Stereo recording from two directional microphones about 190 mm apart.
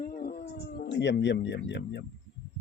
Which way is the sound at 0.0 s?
50° left (ahead or behind).